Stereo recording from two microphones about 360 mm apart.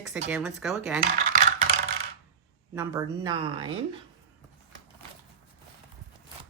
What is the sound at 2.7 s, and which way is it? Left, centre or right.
Speech, centre.